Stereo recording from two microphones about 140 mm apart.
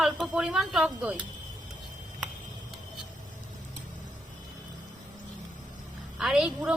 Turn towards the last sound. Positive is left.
turn(degrees=-5)  # may be behind; listen again after turning